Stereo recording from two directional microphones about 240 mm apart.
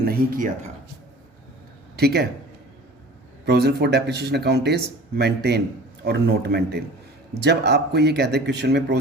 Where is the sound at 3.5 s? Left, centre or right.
Right.